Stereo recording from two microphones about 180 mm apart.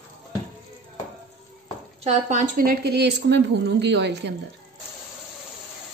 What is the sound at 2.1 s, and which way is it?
A woman's voice, 40° right (ahead or behind).